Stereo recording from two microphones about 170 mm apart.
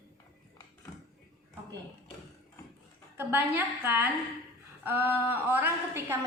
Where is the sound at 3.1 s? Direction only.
10° right (ahead or behind).